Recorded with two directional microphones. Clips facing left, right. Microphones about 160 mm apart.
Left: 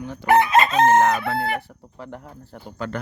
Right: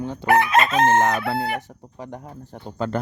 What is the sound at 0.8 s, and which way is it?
Speech, 25° right (ahead or behind).